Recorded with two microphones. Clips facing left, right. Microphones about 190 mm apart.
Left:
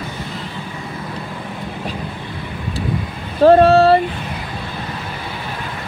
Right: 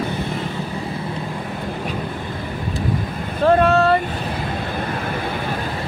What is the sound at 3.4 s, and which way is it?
Vehicle, 35° left (ahead or behind).